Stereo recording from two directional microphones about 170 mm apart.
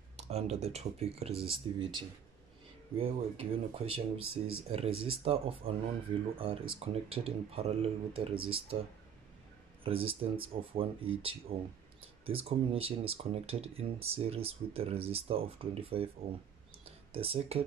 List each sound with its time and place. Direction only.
0.2 s speech: 40° right (ahead or behind)
9.8 s speech: 35° right (ahead or behind)
17.1 s speech: 35° right (ahead or behind)